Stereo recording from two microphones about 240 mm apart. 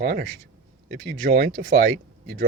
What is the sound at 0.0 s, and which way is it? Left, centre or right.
Speech, right.